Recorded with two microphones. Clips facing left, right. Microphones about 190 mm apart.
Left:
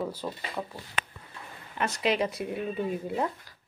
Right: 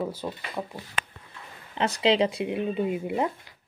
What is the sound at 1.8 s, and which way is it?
Speech, 25° right (ahead or behind).